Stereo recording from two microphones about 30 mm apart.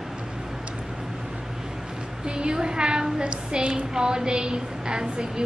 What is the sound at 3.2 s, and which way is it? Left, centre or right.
Child singing, right.